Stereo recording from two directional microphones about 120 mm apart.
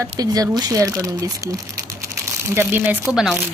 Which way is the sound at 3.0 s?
5° right (ahead or behind).